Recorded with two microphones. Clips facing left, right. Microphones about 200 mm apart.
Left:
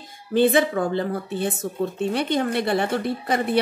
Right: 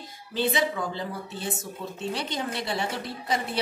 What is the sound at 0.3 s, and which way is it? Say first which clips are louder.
A woman's voice: left 8 dB; 55° left (ahead or behind).